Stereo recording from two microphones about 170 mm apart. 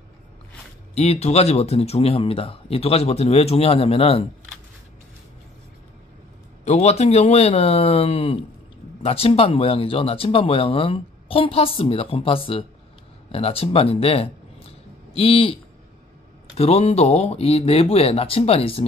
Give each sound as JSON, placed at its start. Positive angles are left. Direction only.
{"t": 0.9, "sound": "speech", "side_deg": 40}
{"t": 6.6, "sound": "speech", "side_deg": 40}